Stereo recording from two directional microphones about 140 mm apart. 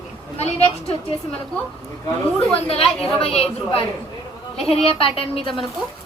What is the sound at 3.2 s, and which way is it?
Speech, 45° left (ahead or behind).